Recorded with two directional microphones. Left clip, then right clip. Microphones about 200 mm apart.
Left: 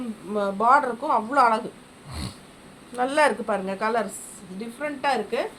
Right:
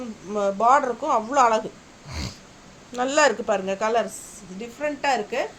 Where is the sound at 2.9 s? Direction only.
35° right (ahead or behind).